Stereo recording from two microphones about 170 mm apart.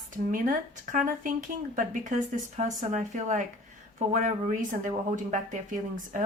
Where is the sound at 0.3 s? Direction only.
50° right (ahead or behind).